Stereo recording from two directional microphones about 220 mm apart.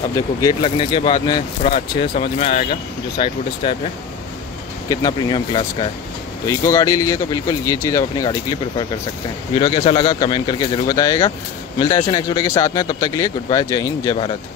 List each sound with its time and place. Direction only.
0.1 s speech: 15° left (ahead or behind)
4.8 s a man's voice: 20° left (ahead or behind)